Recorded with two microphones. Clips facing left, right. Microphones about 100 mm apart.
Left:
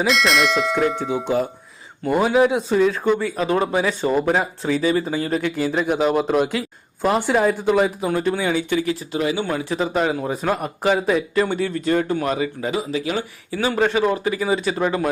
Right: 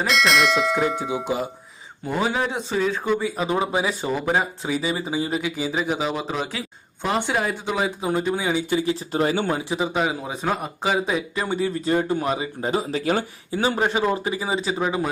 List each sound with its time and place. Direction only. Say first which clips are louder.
0.0 s speech: left 1 dB; centre (ahead or behind)
2.0 s speech: left 7 dB; 5° left (ahead or behind)
7.9 s speech: left 2 dB; 20° right (ahead or behind)
9.1 s speech: right 1 dB; 40° right (ahead or behind)
9.5 s speech: left 1 dB; 20° right (ahead or behind)
9.7 s speech: left 5 dB; 10° right (ahead or behind)
11.5 s speech: left 2 dB; 20° right (ahead or behind)
12.6 s speech: even; 40° right (ahead or behind)
13.5 s speech: even; 25° right (ahead or behind)
13.7 s speech: left 3 dB; 15° right (ahead or behind)
14.8 s speech: left 3 dB; 10° right (ahead or behind)